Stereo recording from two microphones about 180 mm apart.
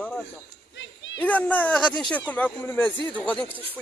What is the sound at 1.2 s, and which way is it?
Speech, 10° left (ahead or behind).